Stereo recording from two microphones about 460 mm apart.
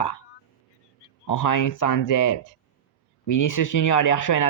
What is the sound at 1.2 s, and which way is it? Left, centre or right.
Speech, left.